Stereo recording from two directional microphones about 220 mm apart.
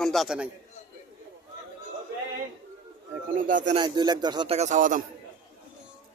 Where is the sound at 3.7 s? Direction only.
20° right (ahead or behind); by 5.0 s 35° right (ahead or behind).